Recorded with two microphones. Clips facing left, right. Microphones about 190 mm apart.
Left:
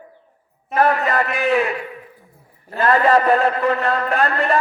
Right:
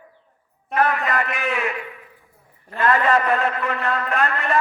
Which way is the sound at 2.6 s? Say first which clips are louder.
Left 3 dB; 35° left (ahead or behind).